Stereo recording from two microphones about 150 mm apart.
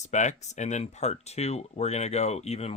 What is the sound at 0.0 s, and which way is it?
Speech, 50° left (ahead or behind).